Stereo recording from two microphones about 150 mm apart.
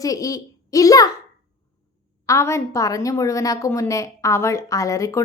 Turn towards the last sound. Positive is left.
turn(degrees=20)  # may be behind; listen again after turning